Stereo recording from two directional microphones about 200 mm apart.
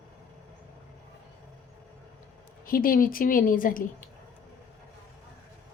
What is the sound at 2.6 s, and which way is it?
A woman's voice, 45° left (ahead or behind).